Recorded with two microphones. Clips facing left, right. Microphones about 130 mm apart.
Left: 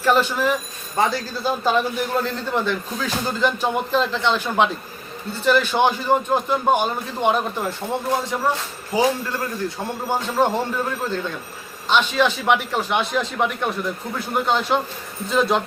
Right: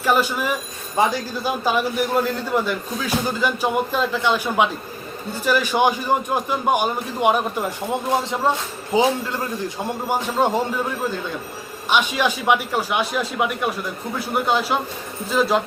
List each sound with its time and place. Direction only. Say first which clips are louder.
0.0 s a man's voice: left 1 dB; 10° right (ahead or behind)